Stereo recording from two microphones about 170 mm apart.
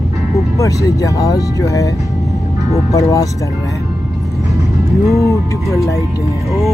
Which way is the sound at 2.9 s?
20° left (ahead or behind).